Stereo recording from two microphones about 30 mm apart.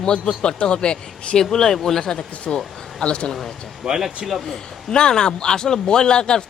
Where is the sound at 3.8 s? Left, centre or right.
Centre.